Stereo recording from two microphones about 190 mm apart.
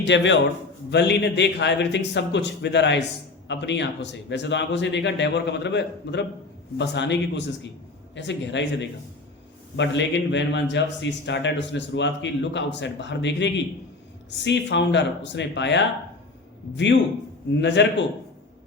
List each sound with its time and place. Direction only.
0.0 s a man's voice: 70° left (ahead or behind)
17.6 s speech: 70° left (ahead or behind)